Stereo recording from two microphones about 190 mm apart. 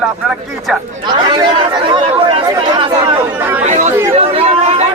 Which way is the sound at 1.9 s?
30° right (ahead or behind).